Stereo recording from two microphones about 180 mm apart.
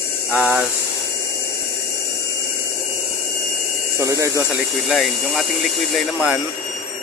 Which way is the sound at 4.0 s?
15° right (ahead or behind).